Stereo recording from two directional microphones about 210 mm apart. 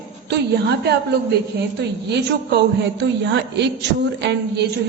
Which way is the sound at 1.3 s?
50° right (ahead or behind).